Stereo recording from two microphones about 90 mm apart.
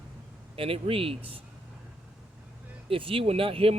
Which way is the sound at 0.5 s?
90° right.